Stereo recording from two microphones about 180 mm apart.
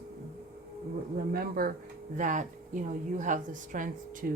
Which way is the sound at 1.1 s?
55° right (ahead or behind).